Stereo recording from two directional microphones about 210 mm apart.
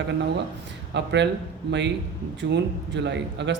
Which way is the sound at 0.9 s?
55° right (ahead or behind).